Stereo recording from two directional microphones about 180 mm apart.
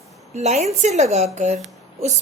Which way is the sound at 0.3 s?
40° right (ahead or behind).